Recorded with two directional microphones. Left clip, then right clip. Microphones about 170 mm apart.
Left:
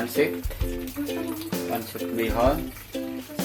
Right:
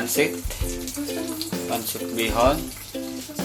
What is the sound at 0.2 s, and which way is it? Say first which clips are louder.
Speech: even; 10° right (ahead or behind).